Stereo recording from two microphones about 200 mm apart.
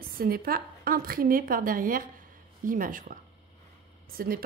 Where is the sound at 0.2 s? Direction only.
50° right (ahead or behind).